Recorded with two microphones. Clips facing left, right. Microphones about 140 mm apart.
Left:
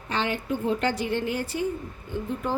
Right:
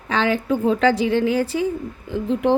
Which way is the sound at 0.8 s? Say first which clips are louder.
Right 9 dB; 90° right.